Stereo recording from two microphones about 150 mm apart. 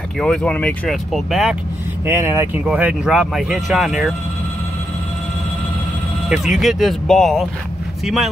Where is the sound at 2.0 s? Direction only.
15° right (ahead or behind).